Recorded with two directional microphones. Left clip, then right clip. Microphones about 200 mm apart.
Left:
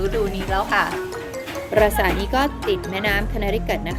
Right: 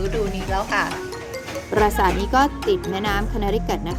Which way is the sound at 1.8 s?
15° right (ahead or behind).